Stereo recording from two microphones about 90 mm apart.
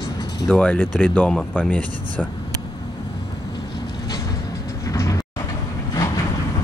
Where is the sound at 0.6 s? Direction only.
15° left (ahead or behind).